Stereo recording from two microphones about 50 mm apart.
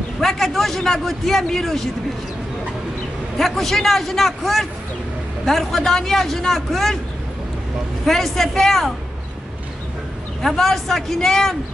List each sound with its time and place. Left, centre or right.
0.2 s a man's voice: centre
3.3 s a man's voice: centre
8.1 s a man's voice: centre
10.4 s a man's voice: centre